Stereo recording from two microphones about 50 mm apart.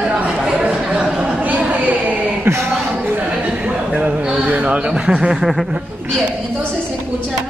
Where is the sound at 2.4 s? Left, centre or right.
Right.